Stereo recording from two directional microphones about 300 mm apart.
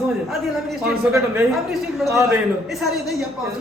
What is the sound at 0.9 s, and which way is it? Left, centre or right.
A man's voice, centre.